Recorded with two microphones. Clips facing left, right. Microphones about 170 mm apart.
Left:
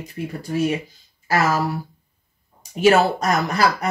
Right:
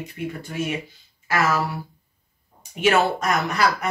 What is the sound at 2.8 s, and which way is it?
Speech, 35° left (ahead or behind).